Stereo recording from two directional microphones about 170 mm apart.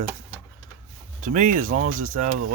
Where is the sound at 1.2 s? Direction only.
50° right (ahead or behind).